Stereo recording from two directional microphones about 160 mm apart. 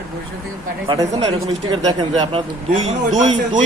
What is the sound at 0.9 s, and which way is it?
Speech, 20° right (ahead or behind).